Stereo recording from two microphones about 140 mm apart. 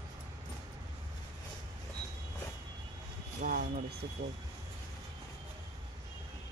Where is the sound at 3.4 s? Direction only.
90° right.